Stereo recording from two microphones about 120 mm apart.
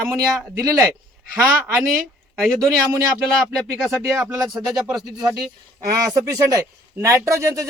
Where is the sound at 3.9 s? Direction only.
25° right (ahead or behind).